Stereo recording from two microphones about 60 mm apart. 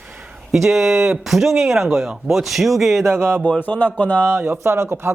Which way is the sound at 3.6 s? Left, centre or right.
Left.